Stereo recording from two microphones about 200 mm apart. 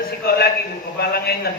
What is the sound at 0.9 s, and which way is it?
Speech, 50° left (ahead or behind).